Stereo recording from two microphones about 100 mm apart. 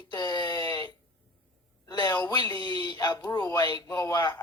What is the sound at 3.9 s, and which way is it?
Speech, 30° left (ahead or behind).